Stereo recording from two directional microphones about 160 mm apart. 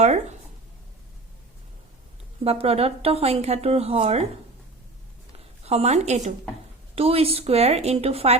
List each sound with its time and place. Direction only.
0.0 s speech: 45° right (ahead or behind)
2.4 s speech: 40° right (ahead or behind)
5.6 s a woman's voice: 40° right (ahead or behind)